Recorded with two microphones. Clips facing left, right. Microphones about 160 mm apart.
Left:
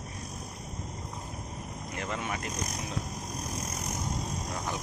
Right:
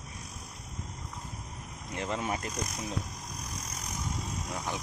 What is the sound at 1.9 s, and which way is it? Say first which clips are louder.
Speech: right 2 dB; 30° right (ahead or behind).